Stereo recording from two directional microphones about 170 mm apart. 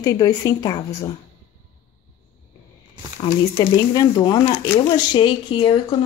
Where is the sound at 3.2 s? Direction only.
25° left (ahead or behind).